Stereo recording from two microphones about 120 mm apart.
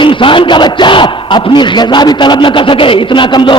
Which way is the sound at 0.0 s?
45° left (ahead or behind).